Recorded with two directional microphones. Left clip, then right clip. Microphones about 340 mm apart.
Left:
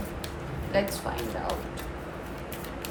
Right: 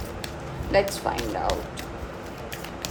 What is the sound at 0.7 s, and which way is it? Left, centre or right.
Speech, right.